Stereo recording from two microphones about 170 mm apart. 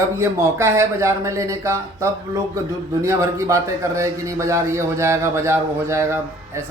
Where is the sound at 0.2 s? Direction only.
15° right (ahead or behind).